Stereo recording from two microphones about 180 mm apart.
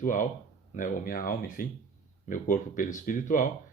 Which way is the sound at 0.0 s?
45° left (ahead or behind).